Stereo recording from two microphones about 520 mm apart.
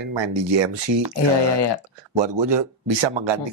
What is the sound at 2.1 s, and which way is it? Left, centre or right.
Speech, right.